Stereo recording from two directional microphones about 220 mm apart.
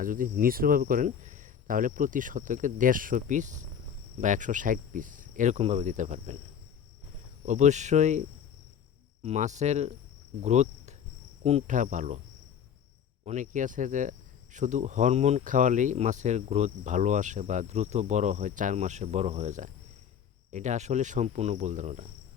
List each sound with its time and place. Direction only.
0.0 s speech: 40° right (ahead or behind)
7.4 s speech: 35° right (ahead or behind)
9.2 s speech: 30° right (ahead or behind)
13.2 s speech: 35° right (ahead or behind)